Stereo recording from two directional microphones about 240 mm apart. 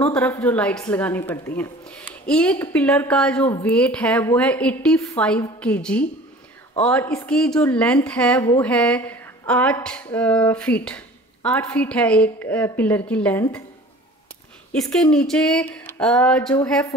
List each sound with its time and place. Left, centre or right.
0.0 s a woman's voice: centre
14.7 s speech: centre